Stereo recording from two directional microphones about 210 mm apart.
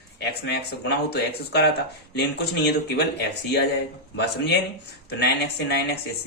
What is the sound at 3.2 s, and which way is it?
A man's voice, 55° left (ahead or behind).